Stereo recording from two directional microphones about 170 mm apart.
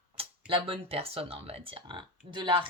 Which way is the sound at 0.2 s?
30° right (ahead or behind).